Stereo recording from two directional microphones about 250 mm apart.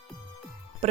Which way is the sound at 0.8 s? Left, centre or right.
Right.